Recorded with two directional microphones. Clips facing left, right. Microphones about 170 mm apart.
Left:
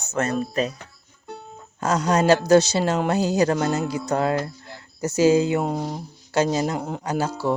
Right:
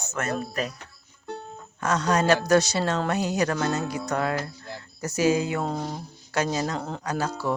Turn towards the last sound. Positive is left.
turn(degrees=30)  # may be behind; listen again after turning